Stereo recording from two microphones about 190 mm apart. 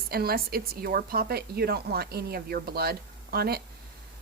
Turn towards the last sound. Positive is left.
turn(degrees=-55)  # may be behind; listen again after turning